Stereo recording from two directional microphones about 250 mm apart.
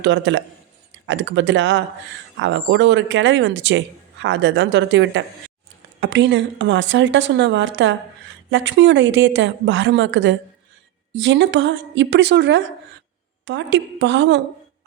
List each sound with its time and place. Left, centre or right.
0.0 s speech: right